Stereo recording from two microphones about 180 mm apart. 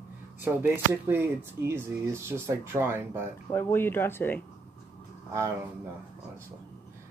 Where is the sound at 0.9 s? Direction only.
15° right (ahead or behind).